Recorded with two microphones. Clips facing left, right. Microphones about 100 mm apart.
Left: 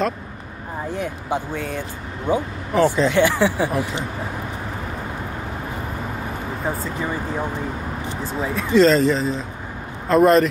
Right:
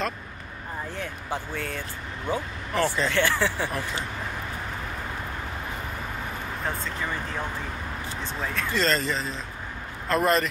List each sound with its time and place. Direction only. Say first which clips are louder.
0.9 s speech: left 9 dB; 15° left (ahead or behind)
2.7 s speech: left 8 dB; centre (ahead or behind)
3.1 s speech: left 7 dB; 15° left (ahead or behind)
7.0 s speech: left 6 dB; 20° left (ahead or behind)
8.2 s speech: left 6 dB; 5° left (ahead or behind)